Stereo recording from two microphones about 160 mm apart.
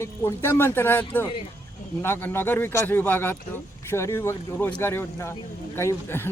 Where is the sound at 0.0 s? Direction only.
15° left (ahead or behind).